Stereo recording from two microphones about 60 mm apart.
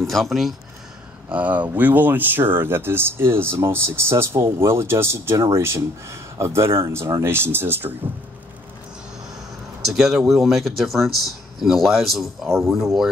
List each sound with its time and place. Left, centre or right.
0.0 s speech: centre
1.3 s speech: right
9.8 s speech: centre